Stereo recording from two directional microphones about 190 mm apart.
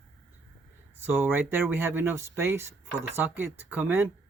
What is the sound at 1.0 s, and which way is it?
Speech, 10° right (ahead or behind).